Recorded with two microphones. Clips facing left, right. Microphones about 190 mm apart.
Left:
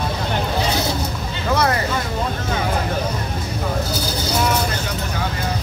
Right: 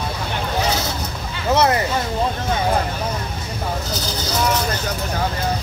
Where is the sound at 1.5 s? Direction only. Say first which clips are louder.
Right 3 dB; 20° right (ahead or behind).